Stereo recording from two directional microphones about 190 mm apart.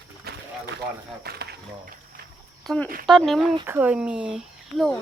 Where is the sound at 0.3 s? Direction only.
55° right (ahead or behind).